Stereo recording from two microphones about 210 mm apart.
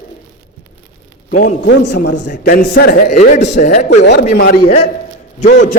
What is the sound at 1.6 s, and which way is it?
Speech, 55° left (ahead or behind).